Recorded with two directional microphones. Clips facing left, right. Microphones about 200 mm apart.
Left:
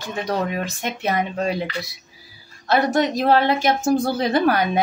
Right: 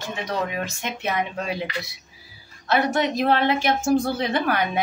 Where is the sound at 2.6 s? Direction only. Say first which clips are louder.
Left 3 dB; 35° left (ahead or behind).